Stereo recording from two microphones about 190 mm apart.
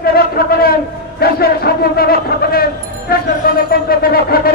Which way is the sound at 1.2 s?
55° left (ahead or behind).